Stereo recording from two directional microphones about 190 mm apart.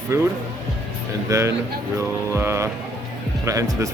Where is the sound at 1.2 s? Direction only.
15° right (ahead or behind).